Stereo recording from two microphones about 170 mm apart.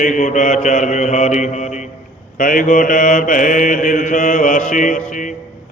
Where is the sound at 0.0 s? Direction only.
45° left (ahead or behind).